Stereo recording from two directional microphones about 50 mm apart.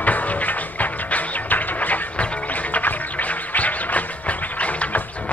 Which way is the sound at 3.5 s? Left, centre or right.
Left.